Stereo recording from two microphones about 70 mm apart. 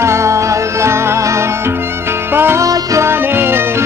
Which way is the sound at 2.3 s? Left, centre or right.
Right.